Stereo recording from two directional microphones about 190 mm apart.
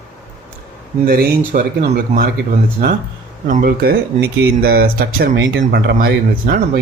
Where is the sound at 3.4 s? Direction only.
45° right (ahead or behind).